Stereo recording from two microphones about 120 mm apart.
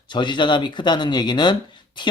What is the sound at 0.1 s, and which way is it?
Speech, 40° left (ahead or behind).